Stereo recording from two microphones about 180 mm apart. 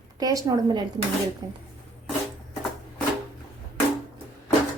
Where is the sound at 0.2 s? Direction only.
20° right (ahead or behind).